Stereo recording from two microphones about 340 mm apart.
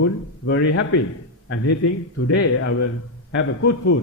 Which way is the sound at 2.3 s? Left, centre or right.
Left.